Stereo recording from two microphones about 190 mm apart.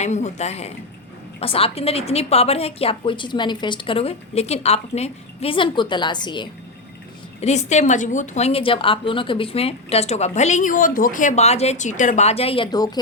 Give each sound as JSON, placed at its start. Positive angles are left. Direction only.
{"t": 0.0, "sound": "a woman's voice", "side_deg": 40}
{"t": 7.4, "sound": "a woman's voice", "side_deg": 35}